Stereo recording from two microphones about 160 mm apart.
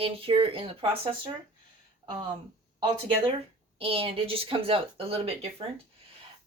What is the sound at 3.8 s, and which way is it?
Speech, 35° right (ahead or behind).